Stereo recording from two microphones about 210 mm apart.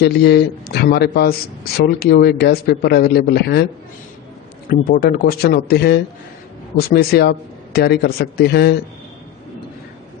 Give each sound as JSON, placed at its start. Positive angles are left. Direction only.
{"t": 0.0, "sound": "speech", "side_deg": 50}
{"t": 4.7, "sound": "speech", "side_deg": 45}